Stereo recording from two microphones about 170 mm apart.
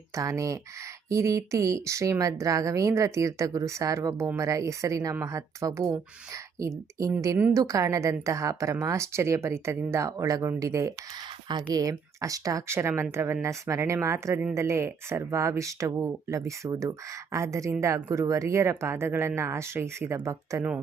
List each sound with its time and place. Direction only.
0.1 s a woman's voice: 20° right (ahead or behind)